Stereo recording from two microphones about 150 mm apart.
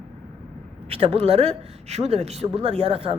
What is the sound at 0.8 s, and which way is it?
A woman's voice, 40° right (ahead or behind).